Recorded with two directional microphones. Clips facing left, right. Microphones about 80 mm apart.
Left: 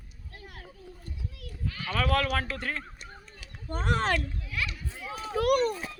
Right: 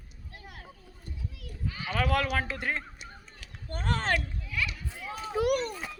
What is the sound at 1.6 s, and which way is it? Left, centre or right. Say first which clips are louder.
Speech: even; centre.